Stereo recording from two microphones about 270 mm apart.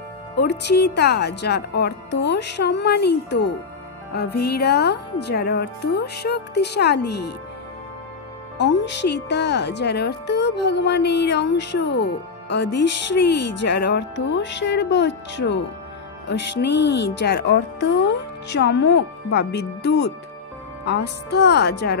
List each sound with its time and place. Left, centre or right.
0.4 s speech: left
8.5 s speech: left